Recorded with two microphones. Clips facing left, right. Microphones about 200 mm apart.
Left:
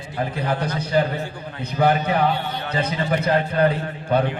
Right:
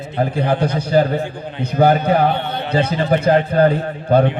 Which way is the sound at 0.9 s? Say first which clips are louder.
Right 5 dB; 40° right (ahead or behind).